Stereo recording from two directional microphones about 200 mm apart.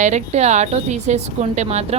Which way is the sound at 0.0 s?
35° right (ahead or behind).